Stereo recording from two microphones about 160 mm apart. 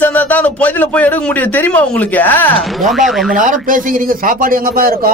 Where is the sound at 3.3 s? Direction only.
55° right (ahead or behind).